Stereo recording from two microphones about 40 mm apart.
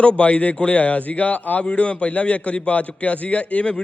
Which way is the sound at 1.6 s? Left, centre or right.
Left.